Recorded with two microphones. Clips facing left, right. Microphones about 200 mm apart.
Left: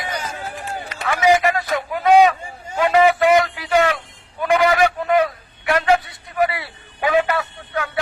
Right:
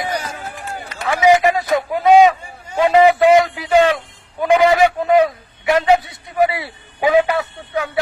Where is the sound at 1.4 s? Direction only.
15° right (ahead or behind).